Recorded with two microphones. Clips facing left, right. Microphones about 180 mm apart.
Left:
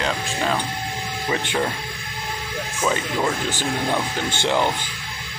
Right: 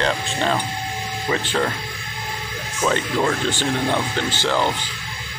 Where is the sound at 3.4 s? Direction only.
15° left (ahead or behind).